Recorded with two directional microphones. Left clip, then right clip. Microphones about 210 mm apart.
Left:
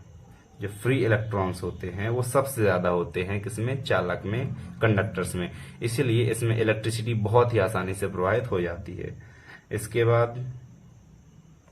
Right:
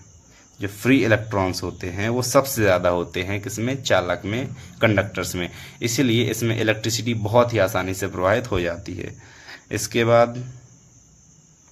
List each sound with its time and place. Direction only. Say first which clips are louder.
0.6 s speech: right 6 dB; 45° right (ahead or behind)